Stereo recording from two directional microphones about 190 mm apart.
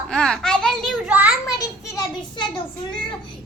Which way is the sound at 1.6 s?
20° left (ahead or behind).